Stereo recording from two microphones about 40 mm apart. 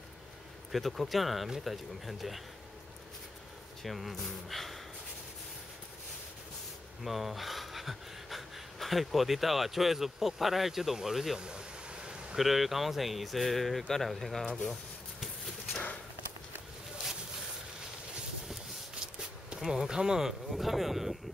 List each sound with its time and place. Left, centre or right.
0.7 s speech: centre
3.8 s speech: centre
7.1 s speech: centre
11.3 s a sound: right
12.4 s speech: centre
19.6 s speech: centre
20.5 s speech: centre